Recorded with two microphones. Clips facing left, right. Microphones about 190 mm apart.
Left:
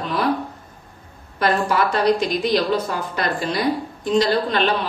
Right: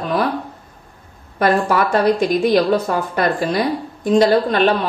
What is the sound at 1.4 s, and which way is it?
A woman's voice, 50° right (ahead or behind).